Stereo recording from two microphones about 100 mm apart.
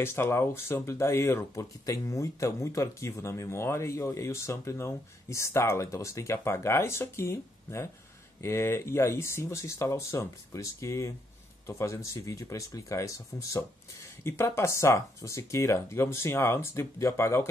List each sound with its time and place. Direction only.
0.0 s speech: 25° left (ahead or behind)